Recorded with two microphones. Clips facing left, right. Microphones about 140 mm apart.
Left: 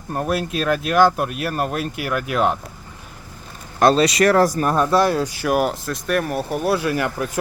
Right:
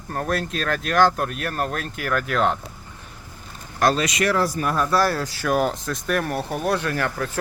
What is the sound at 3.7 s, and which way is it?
Speech, 30° left (ahead or behind).